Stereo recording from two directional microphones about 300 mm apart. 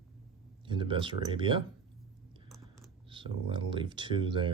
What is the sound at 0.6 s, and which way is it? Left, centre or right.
Speech, centre.